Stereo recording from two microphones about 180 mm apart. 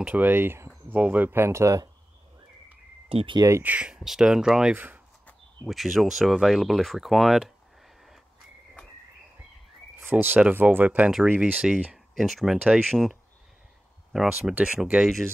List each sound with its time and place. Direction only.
0.0 s speech: 10° right (ahead or behind)
3.1 s speech: 30° right (ahead or behind)
3.4 s speech: 10° right (ahead or behind)
9.9 s speech: 10° right (ahead or behind)